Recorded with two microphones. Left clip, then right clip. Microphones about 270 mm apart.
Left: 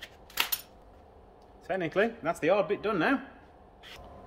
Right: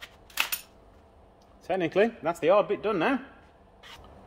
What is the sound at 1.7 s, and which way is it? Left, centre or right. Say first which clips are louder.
Speech: right 4 dB; right.